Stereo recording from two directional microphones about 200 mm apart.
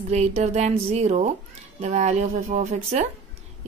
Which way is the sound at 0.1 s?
35° right (ahead or behind).